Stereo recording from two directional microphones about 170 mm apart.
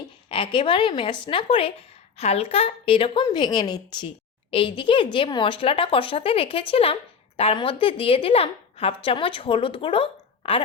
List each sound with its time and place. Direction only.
0.3 s a woman's voice: 30° left (ahead or behind)